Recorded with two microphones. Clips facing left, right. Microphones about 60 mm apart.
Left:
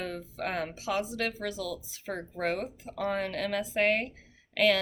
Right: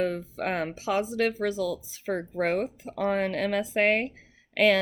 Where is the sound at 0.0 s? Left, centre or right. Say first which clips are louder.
Right 7 dB; right.